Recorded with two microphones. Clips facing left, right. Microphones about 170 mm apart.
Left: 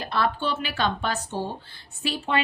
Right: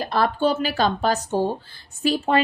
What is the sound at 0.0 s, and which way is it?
A woman's voice, 40° right (ahead or behind).